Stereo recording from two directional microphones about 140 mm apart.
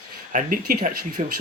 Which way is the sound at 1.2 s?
55° right (ahead or behind).